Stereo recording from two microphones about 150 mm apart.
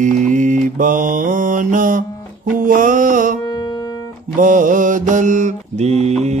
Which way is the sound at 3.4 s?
25° left (ahead or behind).